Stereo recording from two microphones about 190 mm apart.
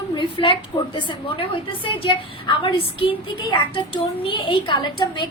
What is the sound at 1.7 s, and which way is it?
A woman's voice, 25° left (ahead or behind).